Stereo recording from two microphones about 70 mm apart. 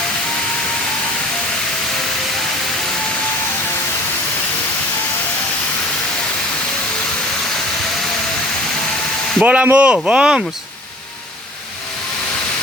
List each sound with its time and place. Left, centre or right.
9.4 s speech: centre